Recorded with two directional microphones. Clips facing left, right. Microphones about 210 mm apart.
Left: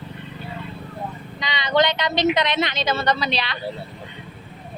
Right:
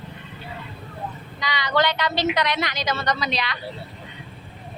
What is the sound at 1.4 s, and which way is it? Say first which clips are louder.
A woman's voice: left 2 dB; 20° left (ahead or behind).